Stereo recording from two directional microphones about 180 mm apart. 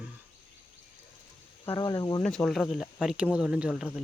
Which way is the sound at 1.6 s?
25° left (ahead or behind).